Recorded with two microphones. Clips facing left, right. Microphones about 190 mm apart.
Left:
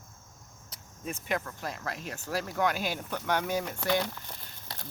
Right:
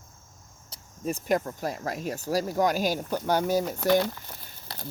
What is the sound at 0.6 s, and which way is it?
Cricket, 40° right (ahead or behind).